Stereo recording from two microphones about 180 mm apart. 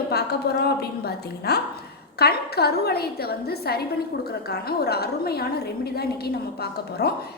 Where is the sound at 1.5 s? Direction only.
65° left (ahead or behind).